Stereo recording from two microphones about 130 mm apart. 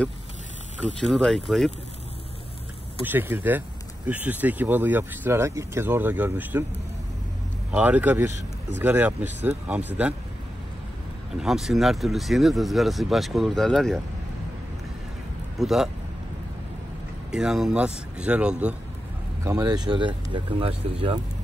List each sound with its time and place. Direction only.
1.0 s speech: centre (ahead or behind)
3.0 s speech: 15° right (ahead or behind)
7.7 s speech: 10° right (ahead or behind)
11.3 s speech: 5° right (ahead or behind)
15.6 s speech: 5° right (ahead or behind)
17.3 s speech: 5° right (ahead or behind)
19.4 s speech: 25° right (ahead or behind); by 21.2 s 45° right (ahead or behind)